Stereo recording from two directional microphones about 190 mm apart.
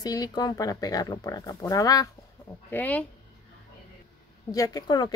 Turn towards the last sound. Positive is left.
turn(degrees=20)  # may be behind; listen again after turning